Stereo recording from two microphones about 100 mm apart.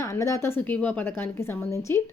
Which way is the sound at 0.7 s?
15° left (ahead or behind).